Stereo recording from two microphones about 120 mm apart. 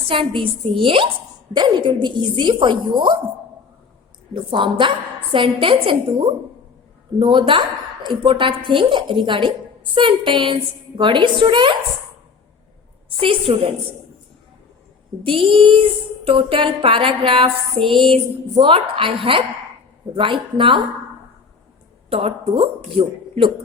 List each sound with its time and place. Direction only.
0.1 s a woman's voice: 45° right (ahead or behind)
4.5 s a woman's voice: 45° right (ahead or behind)
13.1 s a woman's voice: 50° right (ahead or behind)
15.2 s a woman's voice: 45° right (ahead or behind)
22.1 s a woman's voice: 55° right (ahead or behind)